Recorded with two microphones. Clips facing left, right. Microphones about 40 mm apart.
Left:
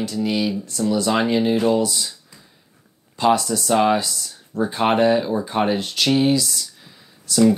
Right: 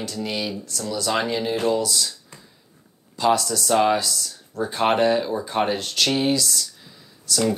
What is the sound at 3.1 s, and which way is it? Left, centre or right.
Speech, left.